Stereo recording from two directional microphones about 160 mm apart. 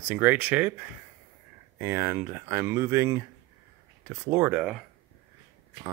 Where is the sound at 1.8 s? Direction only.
15° right (ahead or behind).